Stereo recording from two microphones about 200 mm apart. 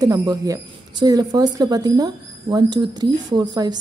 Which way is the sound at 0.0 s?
20° right (ahead or behind).